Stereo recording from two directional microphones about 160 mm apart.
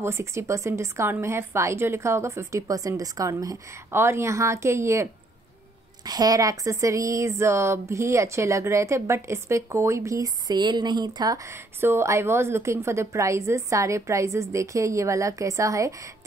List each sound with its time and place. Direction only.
0.0 s a woman's voice: 15° right (ahead or behind)